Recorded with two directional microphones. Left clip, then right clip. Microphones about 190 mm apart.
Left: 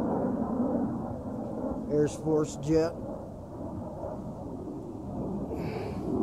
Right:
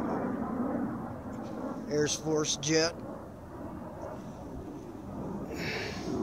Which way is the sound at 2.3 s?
15° right (ahead or behind).